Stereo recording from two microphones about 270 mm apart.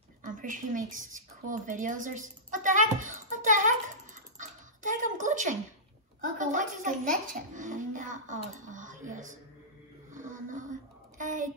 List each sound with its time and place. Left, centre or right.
0.2 s a sound: right
6.3 s a child's voice: right
10.1 s child singing: right